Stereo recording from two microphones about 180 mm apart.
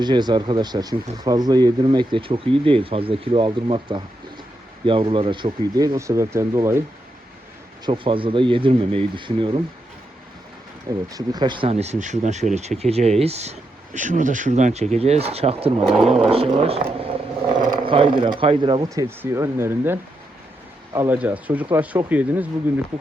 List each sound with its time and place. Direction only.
0.0 s speech: 25° right (ahead or behind)
7.9 s speech: 30° right (ahead or behind)
11.1 s speech: 20° right (ahead or behind)
15.8 s speech: centre (ahead or behind)
16.3 s speech: 35° right (ahead or behind); by 22.8 s 10° right (ahead or behind)